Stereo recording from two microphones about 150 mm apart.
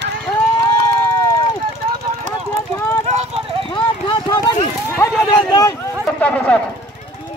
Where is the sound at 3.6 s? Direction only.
30° left (ahead or behind).